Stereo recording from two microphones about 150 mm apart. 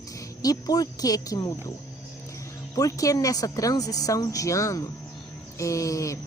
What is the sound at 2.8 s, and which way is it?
A woman's voice, 20° left (ahead or behind).